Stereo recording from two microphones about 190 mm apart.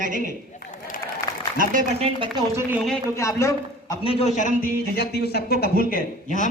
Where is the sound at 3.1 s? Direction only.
15° left (ahead or behind).